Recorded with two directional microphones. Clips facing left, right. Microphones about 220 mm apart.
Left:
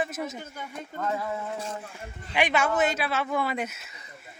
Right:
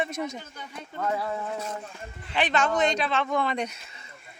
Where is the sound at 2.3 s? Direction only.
10° left (ahead or behind).